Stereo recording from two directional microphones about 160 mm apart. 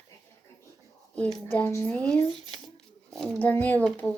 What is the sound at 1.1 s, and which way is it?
A woman's voice, 10° left (ahead or behind).